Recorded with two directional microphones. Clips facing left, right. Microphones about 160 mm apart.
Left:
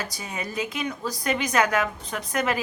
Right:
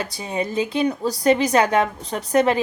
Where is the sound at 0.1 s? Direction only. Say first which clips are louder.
Right 8 dB; 30° right (ahead or behind).